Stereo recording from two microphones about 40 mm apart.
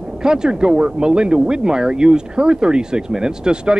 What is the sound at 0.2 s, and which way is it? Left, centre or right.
Speech, centre.